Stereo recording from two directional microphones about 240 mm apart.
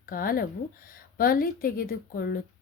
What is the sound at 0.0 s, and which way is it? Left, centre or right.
Speech, left.